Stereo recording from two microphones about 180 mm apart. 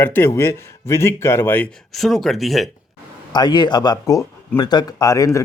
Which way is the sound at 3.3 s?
25° left (ahead or behind).